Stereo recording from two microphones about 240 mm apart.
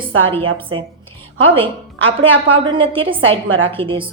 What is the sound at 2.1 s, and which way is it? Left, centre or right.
A woman's voice, right.